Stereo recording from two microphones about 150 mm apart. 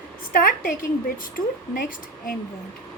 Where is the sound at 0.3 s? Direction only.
70° left (ahead or behind).